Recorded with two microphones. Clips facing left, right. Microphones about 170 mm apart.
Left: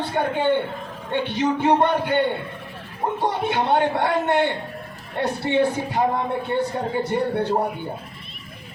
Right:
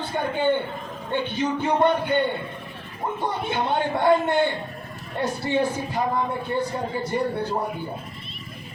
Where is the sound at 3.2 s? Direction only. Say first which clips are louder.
Left 3 dB; 75° left (ahead or behind).